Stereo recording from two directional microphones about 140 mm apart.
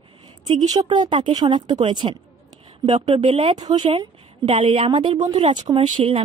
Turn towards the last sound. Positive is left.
turn(degrees=-40)  # may be behind; listen again after turning